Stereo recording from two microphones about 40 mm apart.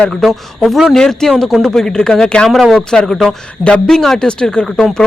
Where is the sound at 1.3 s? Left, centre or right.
Centre.